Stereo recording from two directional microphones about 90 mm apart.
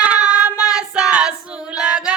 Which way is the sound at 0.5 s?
40° left (ahead or behind).